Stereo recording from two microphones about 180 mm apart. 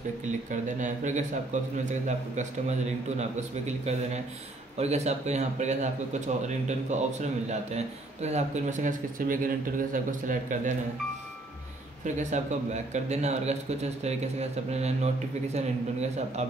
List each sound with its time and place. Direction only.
0.5 s a man's voice: 45° right (ahead or behind)
12.0 s a man's voice: 40° right (ahead or behind)